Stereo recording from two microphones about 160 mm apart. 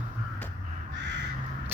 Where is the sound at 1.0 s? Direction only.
90° right.